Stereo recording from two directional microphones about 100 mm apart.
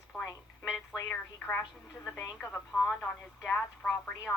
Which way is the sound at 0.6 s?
5° right (ahead or behind).